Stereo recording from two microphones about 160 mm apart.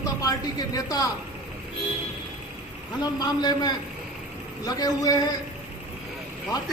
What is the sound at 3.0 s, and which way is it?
Speech, 25° left (ahead or behind).